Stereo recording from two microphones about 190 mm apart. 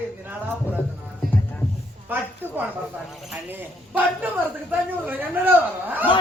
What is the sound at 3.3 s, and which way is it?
Speech, 10° right (ahead or behind).